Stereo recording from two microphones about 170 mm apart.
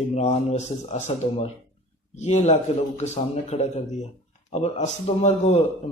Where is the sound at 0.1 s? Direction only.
40° left (ahead or behind).